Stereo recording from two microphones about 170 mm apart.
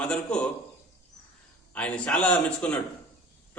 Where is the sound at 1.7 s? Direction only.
5° left (ahead or behind).